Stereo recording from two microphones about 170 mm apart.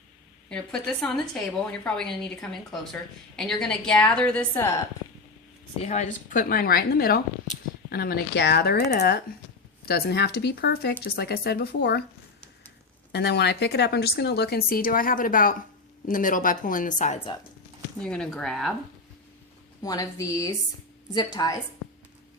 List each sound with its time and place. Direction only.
0.5 s a woman's voice: 5° left (ahead or behind)
5.8 s a woman's voice: 45° left (ahead or behind); by 12.0 s 75° left (ahead or behind)
13.1 s a woman's voice: 80° left; by 17.2 s 50° left (ahead or behind)
18.0 s a woman's voice: 5° left (ahead or behind)
19.8 s a woman's voice: 20° left (ahead or behind)